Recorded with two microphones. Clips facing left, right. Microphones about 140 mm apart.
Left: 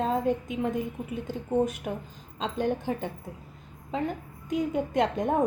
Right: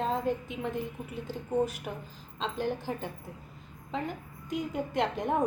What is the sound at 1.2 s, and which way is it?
A woman's voice, 20° left (ahead or behind).